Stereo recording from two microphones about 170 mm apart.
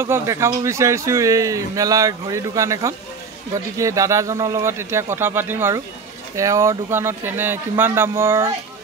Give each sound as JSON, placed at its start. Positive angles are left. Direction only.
{"t": 0.0, "sound": "speech", "side_deg": -15}